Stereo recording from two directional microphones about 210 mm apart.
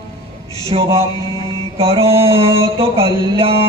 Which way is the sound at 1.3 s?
20° left (ahead or behind).